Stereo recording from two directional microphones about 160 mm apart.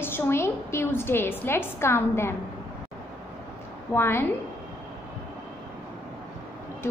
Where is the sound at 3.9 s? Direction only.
15° left (ahead or behind).